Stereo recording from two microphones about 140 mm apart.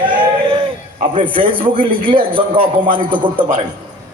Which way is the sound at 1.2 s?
40° right (ahead or behind).